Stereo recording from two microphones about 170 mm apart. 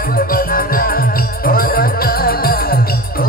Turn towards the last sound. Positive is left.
turn(degrees=65)  # may be behind; listen again after turning